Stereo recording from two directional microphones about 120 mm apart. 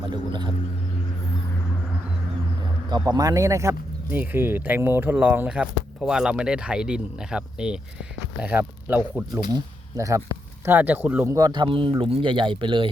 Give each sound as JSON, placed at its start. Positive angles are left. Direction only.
{"t": 0.1, "sound": "speech", "side_deg": -40}
{"t": 2.9, "sound": "speech", "side_deg": -35}
{"t": 10.0, "sound": "speech", "side_deg": -25}
{"t": 10.7, "sound": "speech", "side_deg": -15}
{"t": 11.3, "sound": "speech", "side_deg": -35}